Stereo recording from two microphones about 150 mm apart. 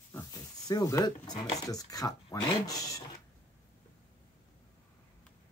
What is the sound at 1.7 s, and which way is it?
Speech, 25° left (ahead or behind).